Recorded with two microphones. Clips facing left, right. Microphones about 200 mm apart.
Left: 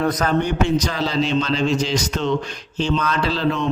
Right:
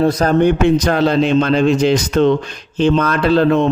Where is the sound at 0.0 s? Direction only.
30° right (ahead or behind).